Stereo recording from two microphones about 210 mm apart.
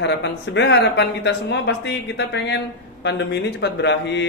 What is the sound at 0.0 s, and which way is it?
Speech, 55° left (ahead or behind).